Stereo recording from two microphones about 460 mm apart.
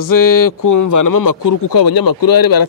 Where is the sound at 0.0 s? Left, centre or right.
Left.